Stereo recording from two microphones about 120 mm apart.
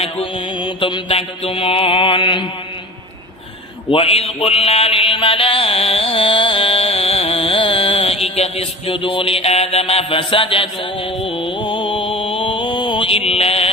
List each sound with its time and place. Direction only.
0.0 s mantra: 50° left (ahead or behind)
3.9 s mantra: 55° left (ahead or behind)
11.2 s music: 50° left (ahead or behind)